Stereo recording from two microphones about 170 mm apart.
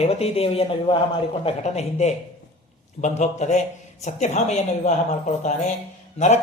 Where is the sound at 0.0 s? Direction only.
35° left (ahead or behind).